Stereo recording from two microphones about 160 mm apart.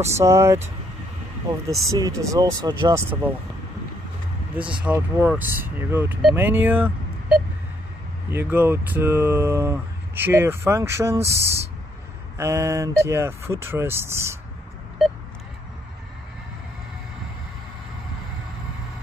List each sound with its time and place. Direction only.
0.1 s speech: 15° right (ahead or behind)
1.7 s speech: 20° right (ahead or behind)
4.8 s speech: 15° right (ahead or behind)